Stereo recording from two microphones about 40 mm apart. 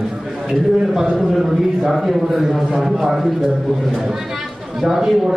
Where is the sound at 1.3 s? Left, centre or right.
Centre.